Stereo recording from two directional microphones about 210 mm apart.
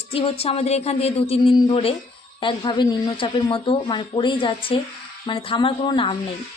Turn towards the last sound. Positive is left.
turn(degrees=20)  # may be behind; listen again after turning